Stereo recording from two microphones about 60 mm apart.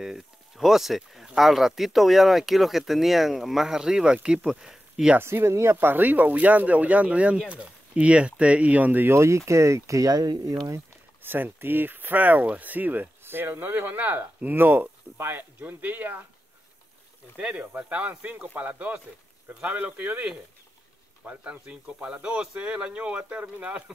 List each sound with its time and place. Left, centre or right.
0.0 s speech: centre
5.2 s speech: right
9.1 s speech: right
11.2 s speech: right
17.4 s speech: right